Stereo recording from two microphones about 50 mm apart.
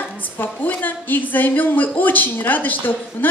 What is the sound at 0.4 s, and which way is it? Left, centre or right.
A woman's voice, left.